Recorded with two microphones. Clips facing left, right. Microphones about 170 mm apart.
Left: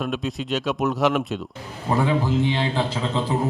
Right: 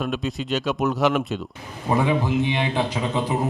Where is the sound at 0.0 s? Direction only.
Centre (ahead or behind).